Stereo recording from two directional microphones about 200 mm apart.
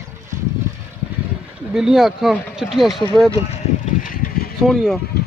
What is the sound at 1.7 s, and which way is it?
Speech, 5° right (ahead or behind).